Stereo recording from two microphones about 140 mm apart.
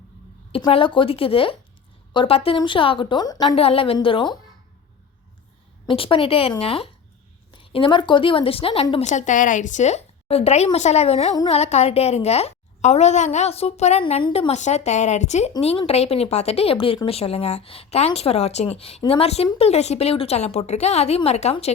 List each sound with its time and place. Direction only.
0.7 s a woman's voice: 35° left (ahead or behind)
3.5 s a woman's voice: 45° left (ahead or behind)
5.8 s a woman's voice: 35° left (ahead or behind)